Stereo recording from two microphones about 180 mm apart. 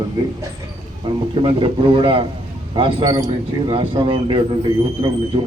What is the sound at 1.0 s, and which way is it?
A man's voice, 30° right (ahead or behind).